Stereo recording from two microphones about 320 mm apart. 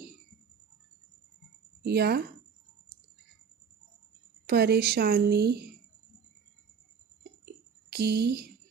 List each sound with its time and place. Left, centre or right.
1.8 s speech: right
4.4 s a woman's voice: right
7.4 s a sound: right